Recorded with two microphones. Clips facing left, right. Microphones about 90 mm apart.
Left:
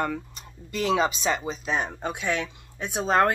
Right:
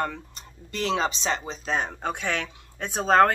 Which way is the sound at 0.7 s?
10° left (ahead or behind).